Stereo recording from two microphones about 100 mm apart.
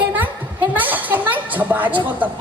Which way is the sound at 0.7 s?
15° right (ahead or behind).